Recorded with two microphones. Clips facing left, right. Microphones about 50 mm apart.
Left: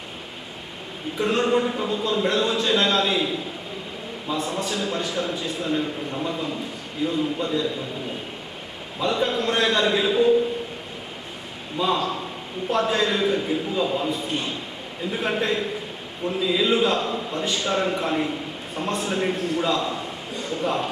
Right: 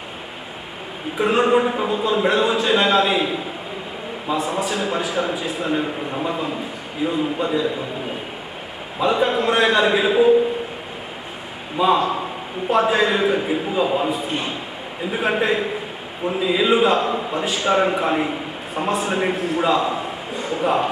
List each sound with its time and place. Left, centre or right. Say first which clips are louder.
1.2 s speech: right 4 dB; centre
4.4 s a man's voice: right 4 dB; centre
9.0 s speech: right 5 dB; centre
11.8 s speech: right 6 dB; centre
14.1 s speech: right 3 dB; centre
18.7 s a man's voice: right 5 dB; centre